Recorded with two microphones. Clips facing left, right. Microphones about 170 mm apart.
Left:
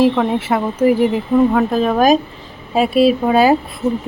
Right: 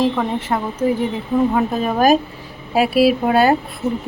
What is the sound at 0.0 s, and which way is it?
Speech, 5° left (ahead or behind).